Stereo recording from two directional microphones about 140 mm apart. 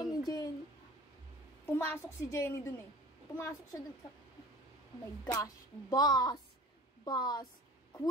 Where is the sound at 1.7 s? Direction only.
15° left (ahead or behind).